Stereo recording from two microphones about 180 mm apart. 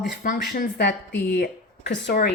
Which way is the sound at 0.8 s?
70° left (ahead or behind).